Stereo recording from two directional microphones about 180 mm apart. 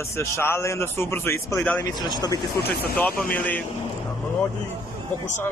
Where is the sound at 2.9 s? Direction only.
10° left (ahead or behind).